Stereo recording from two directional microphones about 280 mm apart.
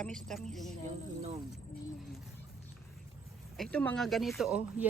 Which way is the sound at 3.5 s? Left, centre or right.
Centre.